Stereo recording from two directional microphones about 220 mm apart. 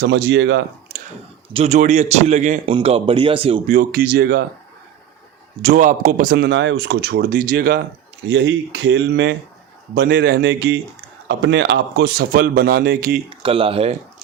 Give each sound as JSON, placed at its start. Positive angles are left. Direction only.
{"t": 0.0, "sound": "speech", "side_deg": -55}
{"t": 1.5, "sound": "a man's voice", "side_deg": -30}
{"t": 3.8, "sound": "speech", "side_deg": -40}
{"t": 5.6, "sound": "speech", "side_deg": -35}
{"t": 13.4, "sound": "a man's voice", "side_deg": -25}